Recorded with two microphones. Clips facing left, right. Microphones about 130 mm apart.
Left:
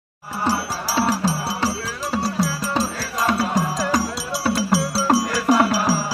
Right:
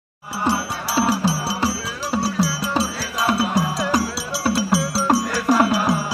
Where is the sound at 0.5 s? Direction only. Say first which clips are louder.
Right 1 dB; centre (ahead or behind).